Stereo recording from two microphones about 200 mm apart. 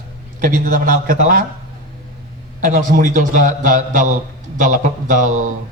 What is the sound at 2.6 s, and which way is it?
A man's voice, 40° right (ahead or behind).